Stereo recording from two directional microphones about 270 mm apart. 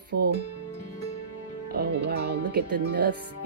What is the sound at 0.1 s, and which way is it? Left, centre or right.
Speech, right.